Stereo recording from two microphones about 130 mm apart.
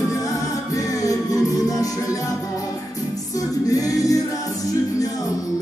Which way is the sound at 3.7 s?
25° left (ahead or behind).